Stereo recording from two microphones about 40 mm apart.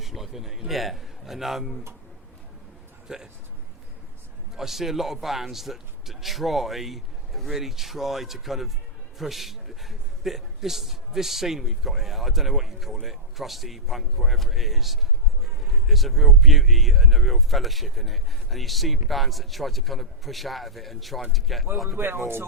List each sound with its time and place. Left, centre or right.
0.0 s a man's voice: centre
3.1 s a man's voice: centre
4.5 s a man's voice: centre
21.8 s speech: right